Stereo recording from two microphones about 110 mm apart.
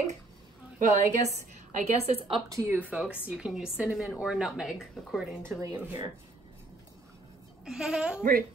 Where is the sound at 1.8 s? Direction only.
80° right; by 2.4 s 60° right (ahead or behind).